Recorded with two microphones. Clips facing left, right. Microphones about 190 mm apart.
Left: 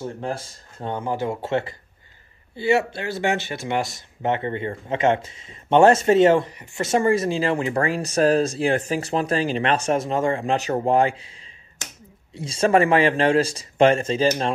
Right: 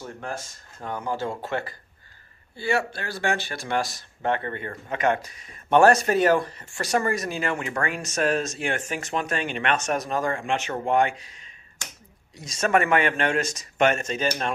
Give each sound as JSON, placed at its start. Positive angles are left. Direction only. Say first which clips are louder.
{"t": 0.0, "sound": "speech", "louder": "left 5 dB", "side_deg": 30}
{"t": 12.4, "sound": "speech", "louder": "left 5 dB", "side_deg": 30}